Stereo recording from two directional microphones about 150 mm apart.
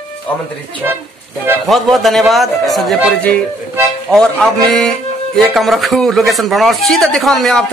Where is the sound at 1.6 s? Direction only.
Centre (ahead or behind).